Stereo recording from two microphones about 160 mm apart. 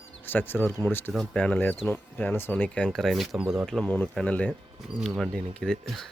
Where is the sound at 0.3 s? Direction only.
10° left (ahead or behind).